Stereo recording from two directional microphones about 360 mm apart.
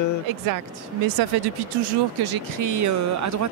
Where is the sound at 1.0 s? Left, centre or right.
Right.